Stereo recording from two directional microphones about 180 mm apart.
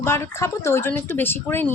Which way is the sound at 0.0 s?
15° left (ahead or behind).